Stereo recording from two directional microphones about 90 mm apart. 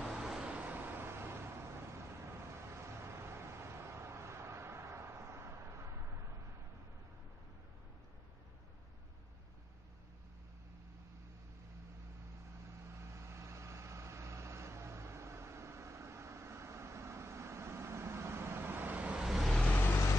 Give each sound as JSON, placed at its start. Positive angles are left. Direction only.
{"t": 0.0, "sound": "vehicle", "side_deg": -5}
{"t": 13.0, "sound": "vehicle", "side_deg": -30}
{"t": 19.2, "sound": "vehicle", "side_deg": 0}
{"t": 19.7, "sound": "vehicle", "side_deg": 25}